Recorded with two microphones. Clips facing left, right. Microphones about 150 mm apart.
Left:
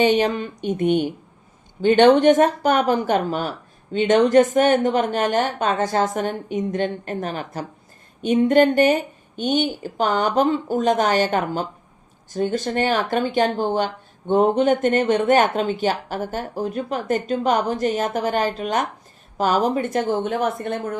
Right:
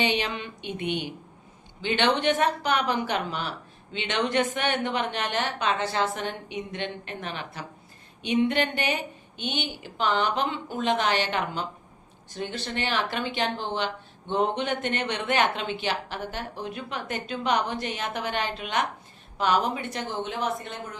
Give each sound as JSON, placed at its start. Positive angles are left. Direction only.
{"t": 0.0, "sound": "speech", "side_deg": 45}